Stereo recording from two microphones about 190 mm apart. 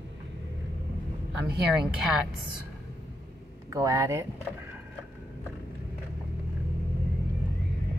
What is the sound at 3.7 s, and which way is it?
Speech, 20° right (ahead or behind).